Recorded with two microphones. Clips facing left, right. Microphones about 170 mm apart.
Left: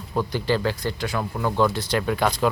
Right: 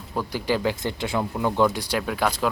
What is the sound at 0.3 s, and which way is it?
Speech, 10° right (ahead or behind).